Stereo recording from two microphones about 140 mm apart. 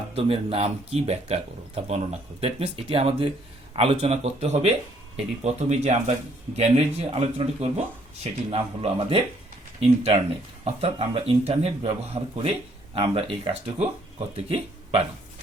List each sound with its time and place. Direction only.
0.2 s speech: 45° right (ahead or behind)
10.6 s speech: 45° right (ahead or behind)